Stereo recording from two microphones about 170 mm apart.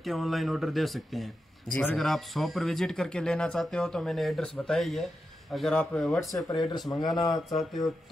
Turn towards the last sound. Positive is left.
turn(degrees=0)  # may be behind; listen again after turning